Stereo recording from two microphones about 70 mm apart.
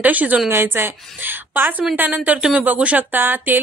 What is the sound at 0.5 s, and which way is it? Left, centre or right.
A woman's voice, right.